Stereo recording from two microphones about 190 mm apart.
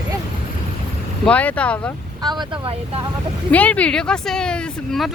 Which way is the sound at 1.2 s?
5° left (ahead or behind).